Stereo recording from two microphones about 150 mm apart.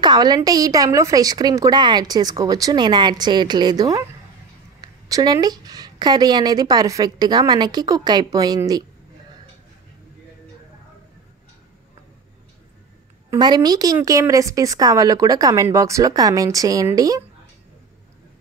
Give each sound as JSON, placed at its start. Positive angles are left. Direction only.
{"t": 0.0, "sound": "a woman's voice", "side_deg": -30}
{"t": 13.4, "sound": "a woman's voice", "side_deg": -30}